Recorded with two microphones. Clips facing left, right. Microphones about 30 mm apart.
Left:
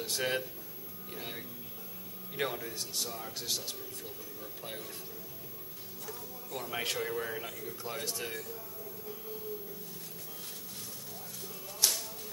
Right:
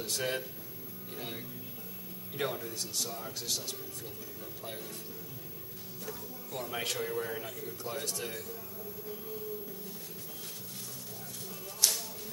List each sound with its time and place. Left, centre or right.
0.0 s speech: centre
3.1 s speech: centre
6.0 s speech: centre
11.8 s music: centre